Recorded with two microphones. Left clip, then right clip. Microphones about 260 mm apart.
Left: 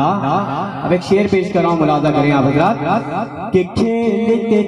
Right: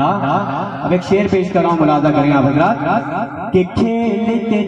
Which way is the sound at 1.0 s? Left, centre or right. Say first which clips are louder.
Even; left.